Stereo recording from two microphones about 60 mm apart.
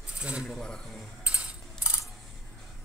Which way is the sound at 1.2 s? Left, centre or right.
Centre.